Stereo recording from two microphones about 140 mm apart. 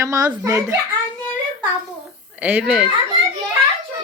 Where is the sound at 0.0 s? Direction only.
20° right (ahead or behind).